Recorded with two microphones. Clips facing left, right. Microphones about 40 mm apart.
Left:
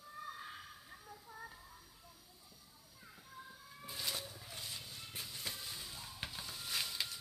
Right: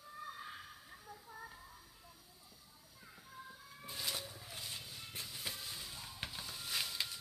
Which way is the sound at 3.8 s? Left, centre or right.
Centre.